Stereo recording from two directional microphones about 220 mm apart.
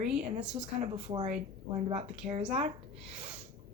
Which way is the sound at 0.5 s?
25° right (ahead or behind).